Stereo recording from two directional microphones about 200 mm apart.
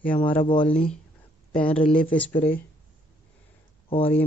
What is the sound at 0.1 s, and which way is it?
Speech, 25° left (ahead or behind).